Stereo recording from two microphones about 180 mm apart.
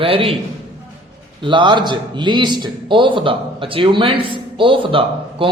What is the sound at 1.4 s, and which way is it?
A man's voice, 25° right (ahead or behind).